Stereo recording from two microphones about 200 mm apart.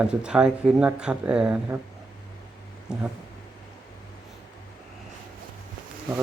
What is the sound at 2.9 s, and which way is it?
Speech, 5° right (ahead or behind).